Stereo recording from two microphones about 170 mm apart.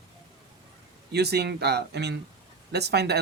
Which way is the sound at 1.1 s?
75° right (ahead or behind).